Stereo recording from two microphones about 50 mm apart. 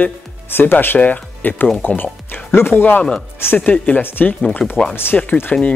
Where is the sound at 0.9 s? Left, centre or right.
Left.